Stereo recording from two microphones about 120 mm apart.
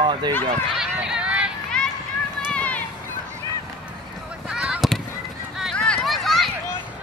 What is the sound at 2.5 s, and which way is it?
Run, 10° left (ahead or behind).